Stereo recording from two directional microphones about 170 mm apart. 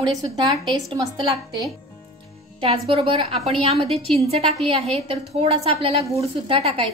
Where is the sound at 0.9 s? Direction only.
20° right (ahead or behind).